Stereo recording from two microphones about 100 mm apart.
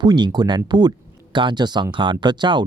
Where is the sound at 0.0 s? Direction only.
45° right (ahead or behind).